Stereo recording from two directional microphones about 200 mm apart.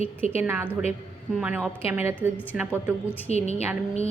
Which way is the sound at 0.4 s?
10° right (ahead or behind).